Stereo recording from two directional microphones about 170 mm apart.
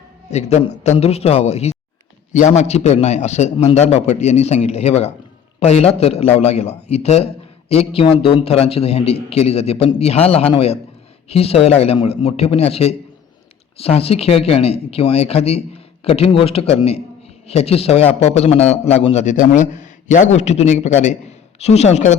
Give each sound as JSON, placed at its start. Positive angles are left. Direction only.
{"t": 0.3, "sound": "a man's voice", "side_deg": 40}